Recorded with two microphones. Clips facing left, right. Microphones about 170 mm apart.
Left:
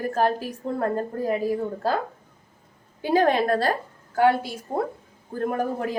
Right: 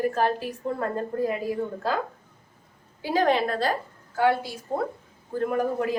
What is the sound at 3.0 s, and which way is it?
Speech, 50° left (ahead or behind).